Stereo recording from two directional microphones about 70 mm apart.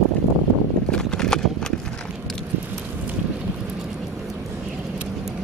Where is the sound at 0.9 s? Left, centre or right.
Centre.